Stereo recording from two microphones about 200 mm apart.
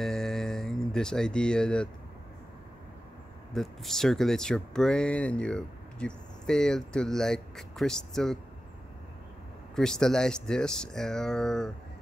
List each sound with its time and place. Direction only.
0.0 s a sound: centre (ahead or behind)
3.5 s speech: centre (ahead or behind)
9.8 s speech: 5° left (ahead or behind)